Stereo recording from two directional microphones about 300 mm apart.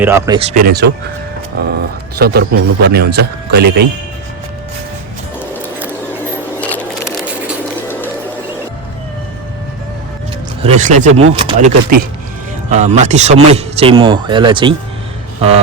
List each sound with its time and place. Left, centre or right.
0.0 s speech: centre; by 0.9 s right
2.1 s a man's voice: right
6.6 s a sound: centre
10.6 s speech: right